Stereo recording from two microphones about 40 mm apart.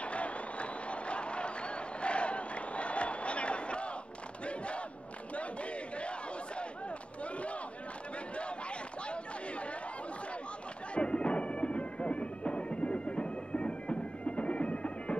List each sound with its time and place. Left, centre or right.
0.0 s a sound: left
4.5 s crowd: left
5.3 s battle cry: left
11.0 s bagpipes: left